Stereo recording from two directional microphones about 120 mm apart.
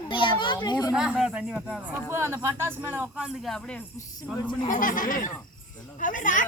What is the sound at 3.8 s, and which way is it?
Speech, 25° left (ahead or behind).